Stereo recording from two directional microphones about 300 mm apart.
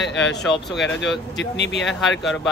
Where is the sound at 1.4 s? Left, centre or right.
Left.